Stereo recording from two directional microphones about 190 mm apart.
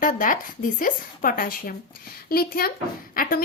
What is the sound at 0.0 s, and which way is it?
A woman's voice, 45° left (ahead or behind).